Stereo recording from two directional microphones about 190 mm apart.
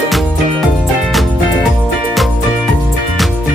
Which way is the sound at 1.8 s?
Centre (ahead or behind).